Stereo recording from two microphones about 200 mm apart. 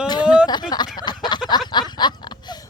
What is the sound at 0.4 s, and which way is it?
Speech, 20° left (ahead or behind).